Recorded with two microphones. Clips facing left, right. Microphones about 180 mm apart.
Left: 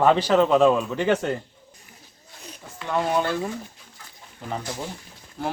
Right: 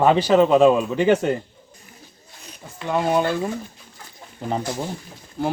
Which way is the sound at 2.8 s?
10° right (ahead or behind).